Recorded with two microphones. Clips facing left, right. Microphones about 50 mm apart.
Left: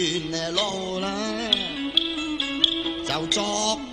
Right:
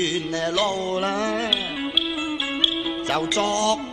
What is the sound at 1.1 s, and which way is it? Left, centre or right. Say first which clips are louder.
Music: right 4 dB; right.